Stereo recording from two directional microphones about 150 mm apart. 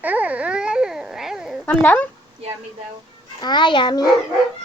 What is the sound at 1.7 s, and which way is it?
Speech, 10° left (ahead or behind).